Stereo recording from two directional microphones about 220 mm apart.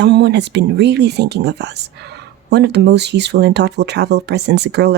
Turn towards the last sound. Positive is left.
turn(degrees=-50)  # may be behind; listen again after turning